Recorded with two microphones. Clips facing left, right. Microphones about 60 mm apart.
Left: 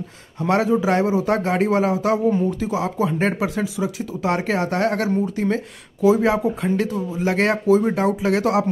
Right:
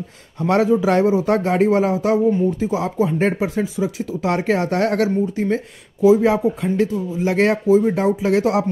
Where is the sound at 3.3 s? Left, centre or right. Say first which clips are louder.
Right 2 dB; left.